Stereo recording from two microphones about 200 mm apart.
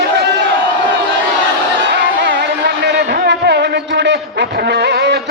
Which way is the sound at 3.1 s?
55° right (ahead or behind).